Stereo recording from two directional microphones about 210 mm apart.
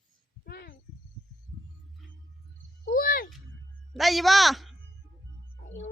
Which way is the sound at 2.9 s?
40° left (ahead or behind).